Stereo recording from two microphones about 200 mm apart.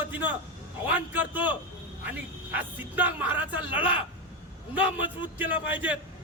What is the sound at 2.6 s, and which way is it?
Speech, 10° right (ahead or behind).